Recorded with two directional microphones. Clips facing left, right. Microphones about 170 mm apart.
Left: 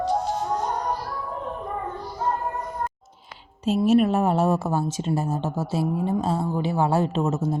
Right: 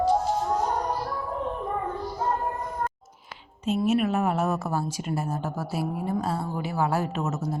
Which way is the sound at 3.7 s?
35° left (ahead or behind).